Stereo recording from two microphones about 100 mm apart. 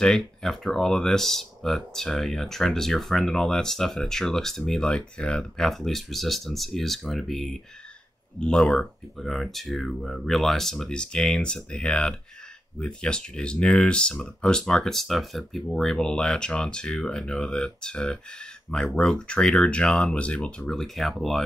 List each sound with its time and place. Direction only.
0.0 s speech: 5° left (ahead or behind)